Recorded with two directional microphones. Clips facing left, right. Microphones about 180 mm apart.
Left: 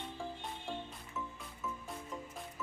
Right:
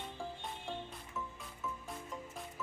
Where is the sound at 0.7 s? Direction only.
Centre (ahead or behind).